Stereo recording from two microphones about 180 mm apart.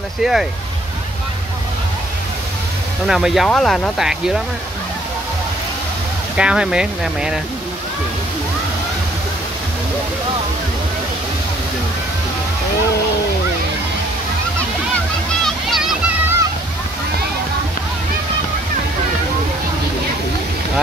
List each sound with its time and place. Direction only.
0.2 s speech: centre (ahead or behind)
3.1 s speech: centre (ahead or behind)
6.3 s speech: 5° right (ahead or behind)
15.4 s a sound: centre (ahead or behind)